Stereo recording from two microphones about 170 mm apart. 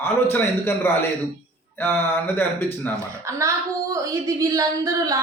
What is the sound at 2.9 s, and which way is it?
A woman's voice, 15° right (ahead or behind).